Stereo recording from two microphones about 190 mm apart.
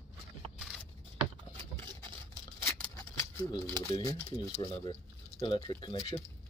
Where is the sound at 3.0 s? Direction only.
15° left (ahead or behind).